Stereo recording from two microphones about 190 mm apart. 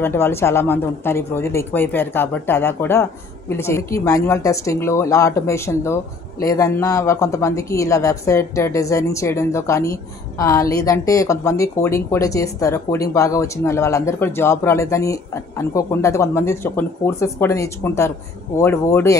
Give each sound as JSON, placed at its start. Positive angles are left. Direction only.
{"t": 0.0, "sound": "a woman's voice", "side_deg": 10}